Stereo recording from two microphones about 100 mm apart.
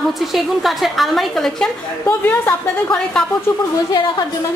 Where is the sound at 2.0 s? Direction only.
15° left (ahead or behind).